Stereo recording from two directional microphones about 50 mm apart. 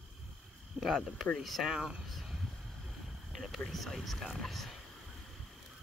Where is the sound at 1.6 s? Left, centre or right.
Centre.